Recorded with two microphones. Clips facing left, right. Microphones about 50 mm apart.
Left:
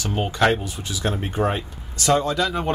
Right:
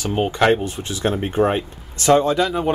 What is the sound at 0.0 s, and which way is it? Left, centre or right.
Speech, centre.